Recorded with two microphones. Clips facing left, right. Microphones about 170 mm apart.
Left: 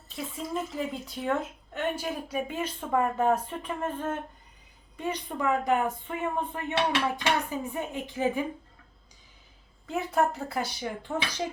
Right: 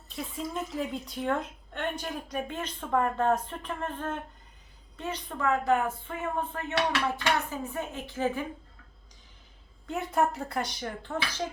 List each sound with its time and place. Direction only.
0.1 s speech: centre (ahead or behind)
9.8 s speech: centre (ahead or behind)